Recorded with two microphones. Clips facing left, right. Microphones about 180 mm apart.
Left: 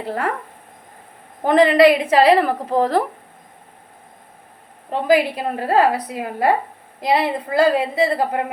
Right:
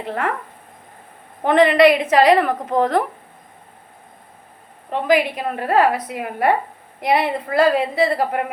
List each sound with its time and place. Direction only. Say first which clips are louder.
1.5 s a woman's voice: even; 35° left (ahead or behind)
4.9 s a woman's voice: left 1 dB; 30° left (ahead or behind)